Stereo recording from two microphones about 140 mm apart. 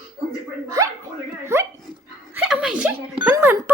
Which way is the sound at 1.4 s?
20° right (ahead or behind).